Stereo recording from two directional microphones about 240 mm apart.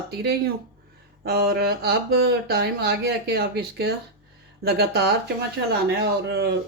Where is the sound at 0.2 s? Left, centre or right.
Right.